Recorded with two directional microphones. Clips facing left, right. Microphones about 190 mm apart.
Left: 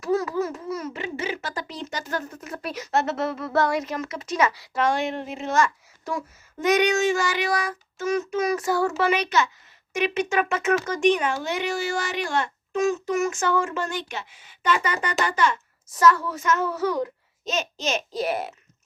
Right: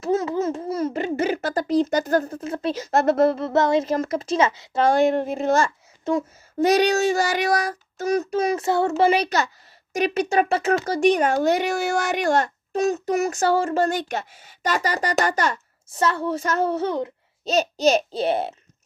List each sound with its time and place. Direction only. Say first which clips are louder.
0.0 s a sound: right 2 dB; 25° right (ahead or behind)
1.9 s a child's voice: right 10 dB; 40° right (ahead or behind)
2.9 s speech: right 6 dB; 50° right (ahead or behind)
3.2 s a child's voice: right 4 dB; 30° right (ahead or behind)
11.8 s speech: right 4 dB; 65° right (ahead or behind)
12.0 s a child's voice: right 6 dB; 45° right (ahead or behind); by 17.5 s 25° right (ahead or behind)
17.5 s a child's voice: right 8 dB; 35° right (ahead or behind)